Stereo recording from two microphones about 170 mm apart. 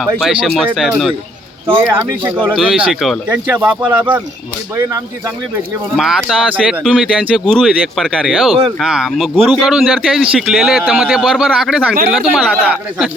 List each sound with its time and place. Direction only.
0.2 s speech: centre (ahead or behind)
1.7 s speech: 15° right (ahead or behind)
6.0 s speech: centre (ahead or behind)